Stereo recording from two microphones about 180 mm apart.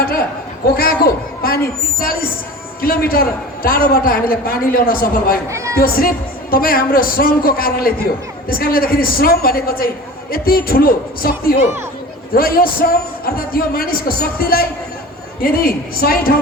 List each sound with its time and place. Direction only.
0.8 s a man's voice: 55° left (ahead or behind)
5.5 s speech: 15° right (ahead or behind)
5.7 s a man's voice: 55° left (ahead or behind)